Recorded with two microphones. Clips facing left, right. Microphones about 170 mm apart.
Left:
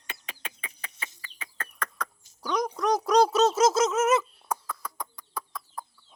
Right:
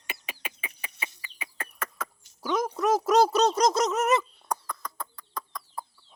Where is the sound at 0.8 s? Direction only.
10° right (ahead or behind).